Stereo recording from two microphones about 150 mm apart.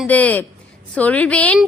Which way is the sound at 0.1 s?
10° left (ahead or behind).